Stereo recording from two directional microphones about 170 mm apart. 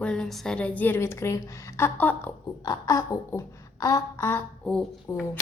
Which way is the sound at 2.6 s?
20° left (ahead or behind).